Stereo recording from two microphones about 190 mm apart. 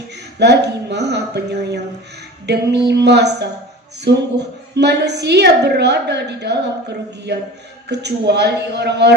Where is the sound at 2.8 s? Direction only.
65° right (ahead or behind).